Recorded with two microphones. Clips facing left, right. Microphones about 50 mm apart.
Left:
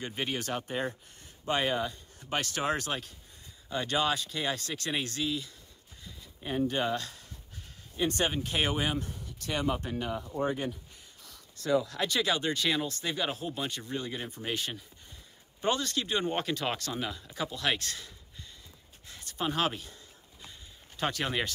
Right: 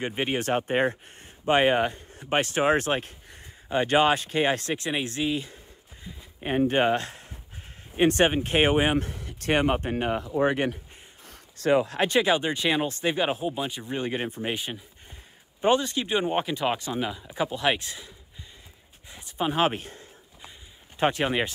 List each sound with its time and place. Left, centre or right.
0.0 s speech: right
4.7 s speech: right
6.1 s a sound: right
6.4 s speech: right
8.9 s speech: right
10.2 s speech: right
11.2 s speech: right
13.4 s speech: centre
13.8 s speech: right
14.5 s speech: centre
19.7 s speech: right
21.0 s speech: right